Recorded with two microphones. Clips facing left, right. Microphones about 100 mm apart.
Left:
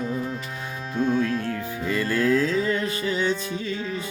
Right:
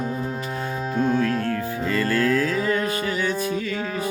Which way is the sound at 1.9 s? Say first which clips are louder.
Even; 20° left (ahead or behind).